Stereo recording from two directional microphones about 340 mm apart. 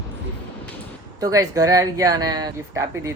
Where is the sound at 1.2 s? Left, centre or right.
Centre.